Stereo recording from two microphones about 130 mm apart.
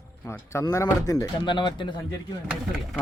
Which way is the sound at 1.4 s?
35° left (ahead or behind).